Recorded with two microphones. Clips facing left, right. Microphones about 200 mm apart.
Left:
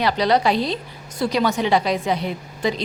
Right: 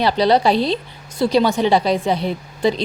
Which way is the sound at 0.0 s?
30° right (ahead or behind).